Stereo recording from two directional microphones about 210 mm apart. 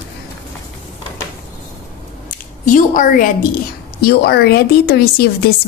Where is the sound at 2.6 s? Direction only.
40° left (ahead or behind).